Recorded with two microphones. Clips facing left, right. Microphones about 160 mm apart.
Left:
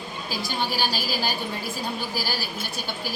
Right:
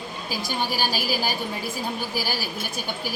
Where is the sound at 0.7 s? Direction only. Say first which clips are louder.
Right 1 dB; 10° right (ahead or behind).